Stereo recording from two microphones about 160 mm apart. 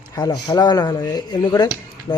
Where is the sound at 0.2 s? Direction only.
20° left (ahead or behind).